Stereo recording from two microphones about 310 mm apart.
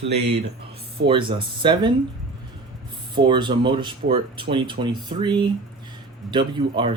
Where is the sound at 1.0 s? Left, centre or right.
Centre.